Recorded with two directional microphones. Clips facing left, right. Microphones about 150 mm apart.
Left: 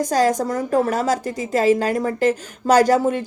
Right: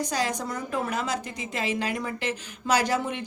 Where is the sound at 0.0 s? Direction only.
45° left (ahead or behind).